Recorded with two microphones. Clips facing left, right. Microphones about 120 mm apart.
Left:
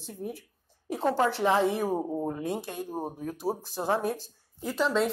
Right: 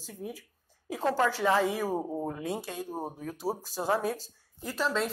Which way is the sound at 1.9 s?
5° left (ahead or behind).